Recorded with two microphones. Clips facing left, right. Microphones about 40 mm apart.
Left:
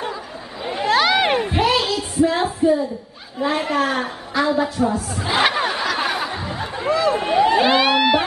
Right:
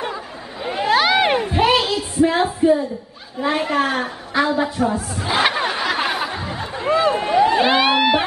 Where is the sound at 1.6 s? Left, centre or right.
Centre.